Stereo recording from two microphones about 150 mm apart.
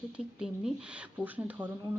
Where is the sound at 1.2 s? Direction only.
10° right (ahead or behind).